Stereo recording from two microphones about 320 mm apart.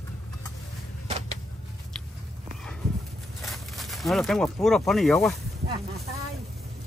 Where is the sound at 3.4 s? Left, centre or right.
Centre.